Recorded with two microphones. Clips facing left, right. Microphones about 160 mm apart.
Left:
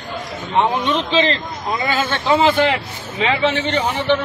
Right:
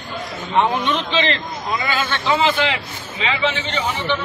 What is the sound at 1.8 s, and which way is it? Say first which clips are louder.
A man's voice: left 5 dB; 45° left (ahead or behind).